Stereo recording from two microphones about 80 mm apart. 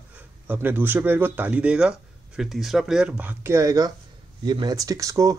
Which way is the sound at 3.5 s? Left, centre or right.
Right.